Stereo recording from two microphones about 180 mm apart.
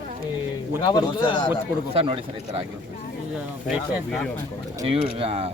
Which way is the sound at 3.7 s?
5° right (ahead or behind).